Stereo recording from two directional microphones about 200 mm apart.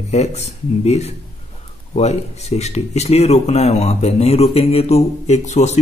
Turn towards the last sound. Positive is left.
turn(degrees=35)  # may be behind; listen again after turning